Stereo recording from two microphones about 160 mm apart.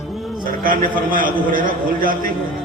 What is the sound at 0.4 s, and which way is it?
A man's voice, 60° right (ahead or behind).